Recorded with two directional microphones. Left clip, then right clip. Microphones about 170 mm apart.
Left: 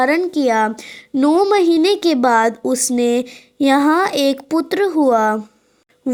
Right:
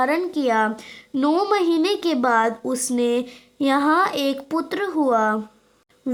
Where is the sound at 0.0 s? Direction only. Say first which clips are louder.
Left 5 dB; 30° left (ahead or behind).